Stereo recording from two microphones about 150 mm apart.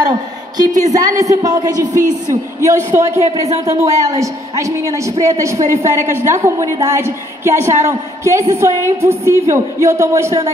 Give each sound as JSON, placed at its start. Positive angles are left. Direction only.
{"t": 0.6, "sound": "a woman's voice", "side_deg": -25}